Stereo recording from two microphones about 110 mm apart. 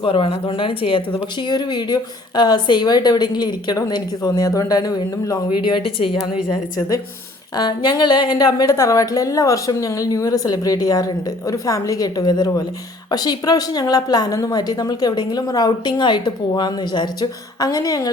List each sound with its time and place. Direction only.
0.0 s speech: 50° left (ahead or behind); by 5.4 s 30° left (ahead or behind)
5.6 s speech: 50° left (ahead or behind)
6.7 s speech: 30° left (ahead or behind)